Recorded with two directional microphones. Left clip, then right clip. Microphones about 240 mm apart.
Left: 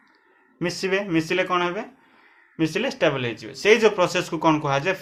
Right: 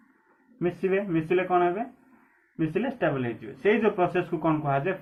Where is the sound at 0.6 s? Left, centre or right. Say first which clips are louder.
Left 2 dB; left.